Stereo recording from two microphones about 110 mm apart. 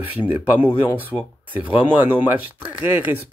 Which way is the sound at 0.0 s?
15° right (ahead or behind).